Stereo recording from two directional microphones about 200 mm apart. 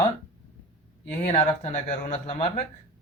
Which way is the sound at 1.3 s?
30° left (ahead or behind).